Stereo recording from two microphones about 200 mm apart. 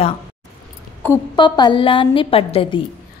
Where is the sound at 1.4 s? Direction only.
20° left (ahead or behind).